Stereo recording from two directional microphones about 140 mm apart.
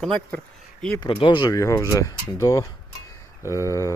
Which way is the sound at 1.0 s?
35° left (ahead or behind).